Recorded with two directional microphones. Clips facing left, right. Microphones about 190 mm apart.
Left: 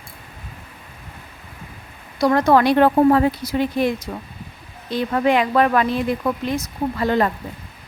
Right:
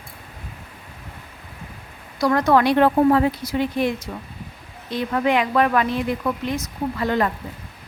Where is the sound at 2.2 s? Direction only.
25° left (ahead or behind).